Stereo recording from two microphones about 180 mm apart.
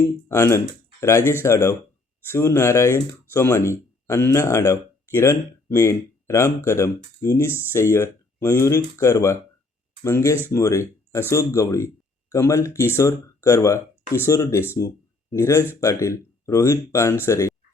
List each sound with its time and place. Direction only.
0.3 s speech: 15° left (ahead or behind)